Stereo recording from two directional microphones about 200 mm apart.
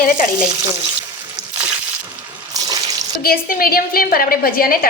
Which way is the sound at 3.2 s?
45° left (ahead or behind).